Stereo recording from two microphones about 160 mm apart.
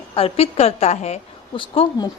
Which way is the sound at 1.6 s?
30° left (ahead or behind).